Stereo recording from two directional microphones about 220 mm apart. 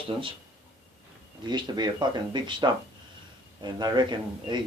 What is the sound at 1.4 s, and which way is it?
Speech, 20° right (ahead or behind).